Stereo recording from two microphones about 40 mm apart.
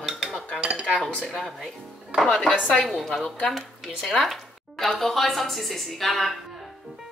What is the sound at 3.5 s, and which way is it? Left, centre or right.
Speech, centre.